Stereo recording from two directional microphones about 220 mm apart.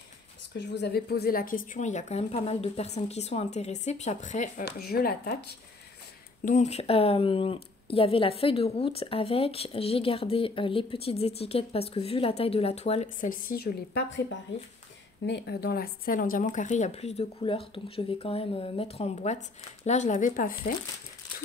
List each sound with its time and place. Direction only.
0.6 s a woman's voice: 50° left (ahead or behind); by 4.6 s 35° left (ahead or behind)
4.6 s speech: 45° left (ahead or behind)
6.4 s a woman's voice: 35° left (ahead or behind)